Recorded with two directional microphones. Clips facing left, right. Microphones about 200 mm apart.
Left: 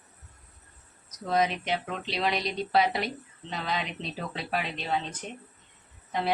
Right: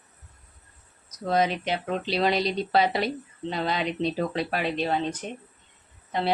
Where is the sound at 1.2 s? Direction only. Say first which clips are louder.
Right 2 dB; 35° right (ahead or behind).